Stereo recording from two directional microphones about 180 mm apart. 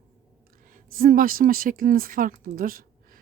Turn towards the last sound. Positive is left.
turn(degrees=-50)  # may be behind; listen again after turning